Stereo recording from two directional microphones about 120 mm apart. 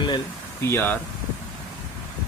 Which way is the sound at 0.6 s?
20° left (ahead or behind).